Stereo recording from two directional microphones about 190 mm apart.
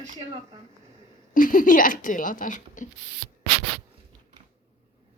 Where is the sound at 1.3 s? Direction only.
45° left (ahead or behind).